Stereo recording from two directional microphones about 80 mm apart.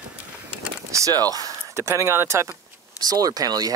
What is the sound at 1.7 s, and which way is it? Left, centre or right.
Speech, right.